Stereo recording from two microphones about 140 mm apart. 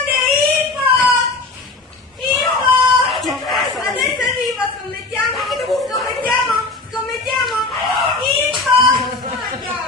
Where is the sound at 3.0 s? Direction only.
Centre (ahead or behind).